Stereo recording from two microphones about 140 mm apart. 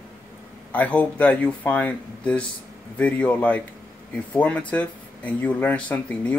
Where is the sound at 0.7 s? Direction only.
10° left (ahead or behind).